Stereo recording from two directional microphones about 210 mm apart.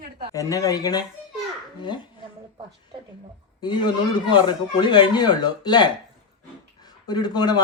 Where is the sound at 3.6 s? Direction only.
20° left (ahead or behind).